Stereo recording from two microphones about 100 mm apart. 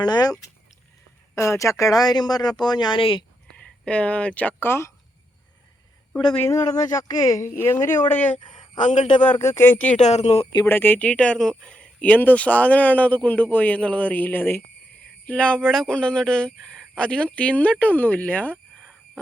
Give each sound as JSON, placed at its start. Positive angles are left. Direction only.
{"t": 0.0, "sound": "speech", "side_deg": 40}
{"t": 1.4, "sound": "speech", "side_deg": 30}
{"t": 3.0, "sound": "speech", "side_deg": 60}
{"t": 3.5, "sound": "speech", "side_deg": 10}
{"t": 6.5, "sound": "speech", "side_deg": 40}
{"t": 7.5, "sound": "speech", "side_deg": 25}
{"t": 9.4, "sound": "speech", "side_deg": 25}
{"t": 10.1, "sound": "speech", "side_deg": 90}
{"t": 10.7, "sound": "speech", "side_deg": 20}
{"t": 18.8, "sound": "a sound", "side_deg": 10}